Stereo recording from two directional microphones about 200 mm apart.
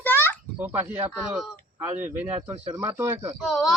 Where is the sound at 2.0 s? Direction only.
35° right (ahead or behind).